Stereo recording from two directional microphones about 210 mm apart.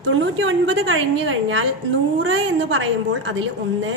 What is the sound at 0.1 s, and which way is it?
A woman's voice, 65° right (ahead or behind).